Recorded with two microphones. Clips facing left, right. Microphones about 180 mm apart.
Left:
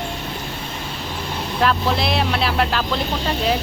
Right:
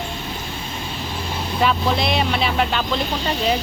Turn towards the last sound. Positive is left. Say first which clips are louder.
# even
turn(degrees=0)  # may be behind; listen again after turning